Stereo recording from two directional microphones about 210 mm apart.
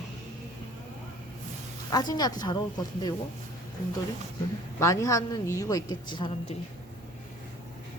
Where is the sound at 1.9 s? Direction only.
20° left (ahead or behind).